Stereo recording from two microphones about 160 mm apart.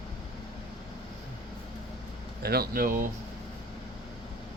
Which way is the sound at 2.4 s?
75° right (ahead or behind).